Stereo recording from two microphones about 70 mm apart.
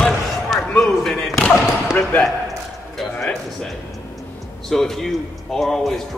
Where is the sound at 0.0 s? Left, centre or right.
Centre.